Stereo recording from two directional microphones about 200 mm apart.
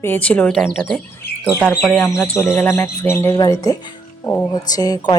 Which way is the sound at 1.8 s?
5° left (ahead or behind).